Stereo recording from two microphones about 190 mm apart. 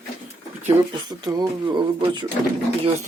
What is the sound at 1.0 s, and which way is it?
Speech, 20° right (ahead or behind).